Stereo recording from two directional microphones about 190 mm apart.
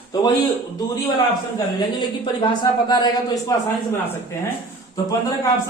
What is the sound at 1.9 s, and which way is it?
Speech, 25° left (ahead or behind).